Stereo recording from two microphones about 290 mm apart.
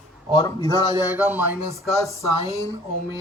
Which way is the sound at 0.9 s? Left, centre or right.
Centre.